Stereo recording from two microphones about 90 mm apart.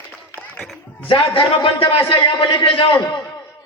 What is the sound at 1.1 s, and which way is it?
Speech, 90° left.